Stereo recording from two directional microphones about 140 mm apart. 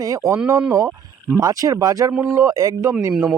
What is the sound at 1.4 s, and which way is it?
Speech, 25° right (ahead or behind).